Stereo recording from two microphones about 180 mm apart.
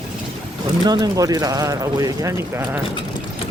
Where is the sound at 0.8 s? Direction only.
20° right (ahead or behind).